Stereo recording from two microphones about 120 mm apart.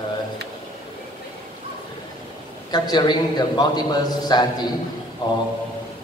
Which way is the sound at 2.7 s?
35° left (ahead or behind).